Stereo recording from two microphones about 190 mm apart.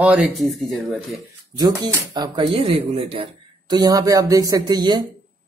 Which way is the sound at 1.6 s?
20° right (ahead or behind).